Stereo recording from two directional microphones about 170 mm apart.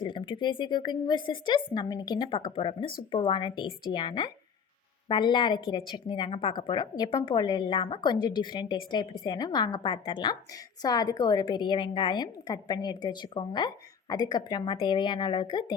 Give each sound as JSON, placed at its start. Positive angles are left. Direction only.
{"t": 0.0, "sound": "a woman's voice", "side_deg": 30}